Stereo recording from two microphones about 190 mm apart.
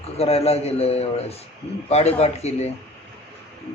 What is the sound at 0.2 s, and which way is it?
Speech, 30° left (ahead or behind).